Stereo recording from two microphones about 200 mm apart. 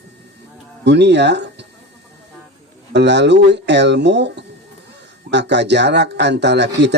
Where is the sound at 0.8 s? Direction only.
60° right (ahead or behind).